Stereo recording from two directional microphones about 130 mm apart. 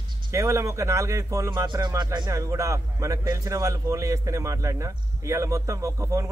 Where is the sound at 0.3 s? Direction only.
25° right (ahead or behind).